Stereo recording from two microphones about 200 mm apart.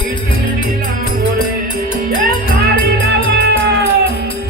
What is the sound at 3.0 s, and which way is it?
Music, 55° right (ahead or behind).